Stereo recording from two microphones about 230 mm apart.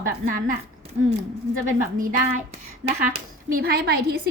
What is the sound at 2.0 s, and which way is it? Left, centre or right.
Speech, right.